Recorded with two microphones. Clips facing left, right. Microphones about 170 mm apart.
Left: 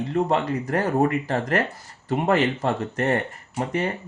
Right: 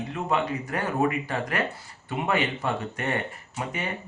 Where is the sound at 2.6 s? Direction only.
45° left (ahead or behind).